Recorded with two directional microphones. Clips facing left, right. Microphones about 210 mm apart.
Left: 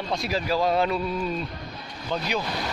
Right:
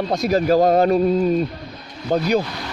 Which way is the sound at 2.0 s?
45° right (ahead or behind).